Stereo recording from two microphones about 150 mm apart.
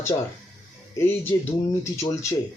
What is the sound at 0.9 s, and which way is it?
Speech, 15° left (ahead or behind).